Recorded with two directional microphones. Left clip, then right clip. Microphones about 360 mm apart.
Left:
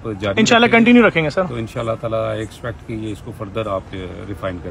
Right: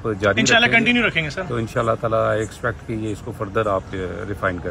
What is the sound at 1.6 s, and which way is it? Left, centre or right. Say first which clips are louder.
Speech: right 2 dB; centre.